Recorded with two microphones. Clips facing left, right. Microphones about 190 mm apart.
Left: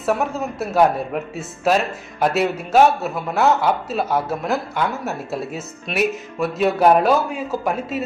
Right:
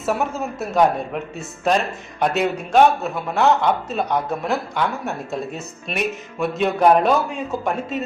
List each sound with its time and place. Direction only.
0.0 s a man's voice: centre (ahead or behind)